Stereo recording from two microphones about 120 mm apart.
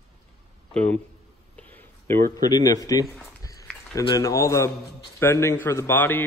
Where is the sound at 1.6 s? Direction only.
20° left (ahead or behind).